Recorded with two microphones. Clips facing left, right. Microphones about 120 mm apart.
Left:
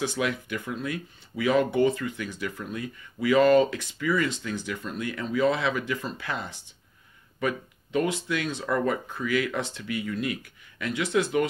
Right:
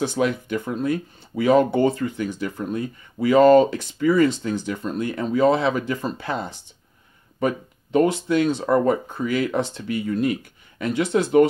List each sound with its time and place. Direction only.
0.0 s speech: 35° right (ahead or behind)